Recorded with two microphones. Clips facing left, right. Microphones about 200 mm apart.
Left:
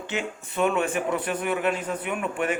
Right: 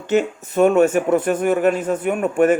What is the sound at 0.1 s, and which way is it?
Speech, 45° right (ahead or behind).